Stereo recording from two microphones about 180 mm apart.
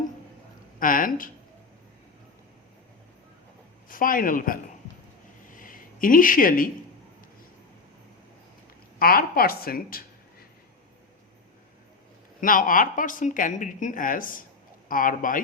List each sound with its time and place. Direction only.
0.8 s speech: 50° left (ahead or behind)
3.8 s speech: 50° left (ahead or behind)
5.5 s a sound: 50° left (ahead or behind)
9.0 s a woman's voice: 55° left (ahead or behind)
12.4 s speech: 50° left (ahead or behind)